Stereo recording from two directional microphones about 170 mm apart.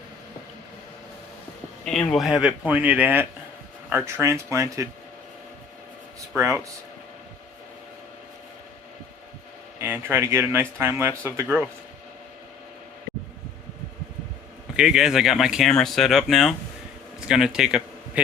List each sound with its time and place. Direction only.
1.8 s speech: 5° left (ahead or behind); by 4.9 s 20° right (ahead or behind)
6.3 s speech: 15° right (ahead or behind)
9.8 s speech: 10° right (ahead or behind)
14.8 s a man's voice: 5° right (ahead or behind)